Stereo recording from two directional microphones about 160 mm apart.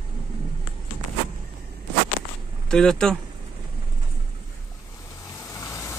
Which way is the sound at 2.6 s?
5° left (ahead or behind).